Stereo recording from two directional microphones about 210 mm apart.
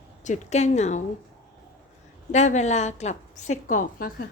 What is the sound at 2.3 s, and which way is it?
A woman's voice, 35° left (ahead or behind).